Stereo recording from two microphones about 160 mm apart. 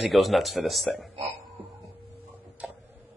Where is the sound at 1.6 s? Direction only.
35° right (ahead or behind).